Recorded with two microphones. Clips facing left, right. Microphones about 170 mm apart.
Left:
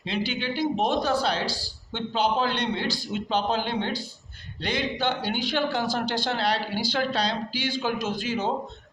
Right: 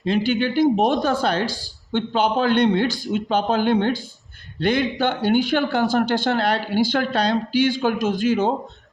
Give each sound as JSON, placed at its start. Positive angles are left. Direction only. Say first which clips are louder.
{"t": 0.0, "sound": "a man's voice", "louder": "right 9 dB", "side_deg": -45}